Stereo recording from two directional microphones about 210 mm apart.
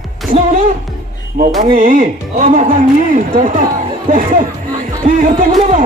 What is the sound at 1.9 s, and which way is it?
Speech, 40° right (ahead or behind).